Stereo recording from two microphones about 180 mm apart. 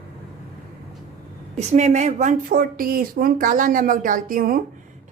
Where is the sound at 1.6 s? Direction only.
40° right (ahead or behind).